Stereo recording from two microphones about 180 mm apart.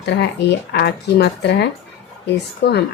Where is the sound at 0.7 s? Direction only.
70° left (ahead or behind).